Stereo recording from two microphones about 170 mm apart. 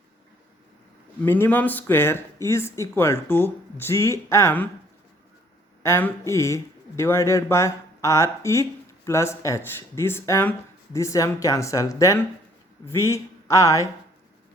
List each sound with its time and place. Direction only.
1.2 s speech: 10° left (ahead or behind)
5.8 s speech: 15° left (ahead or behind)